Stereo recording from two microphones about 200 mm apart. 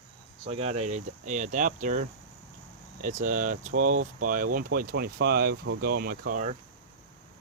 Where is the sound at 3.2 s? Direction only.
40° right (ahead or behind).